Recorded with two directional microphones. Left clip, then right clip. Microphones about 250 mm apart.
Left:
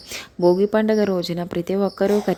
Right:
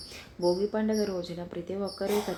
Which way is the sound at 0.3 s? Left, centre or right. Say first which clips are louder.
Left 10 dB; left.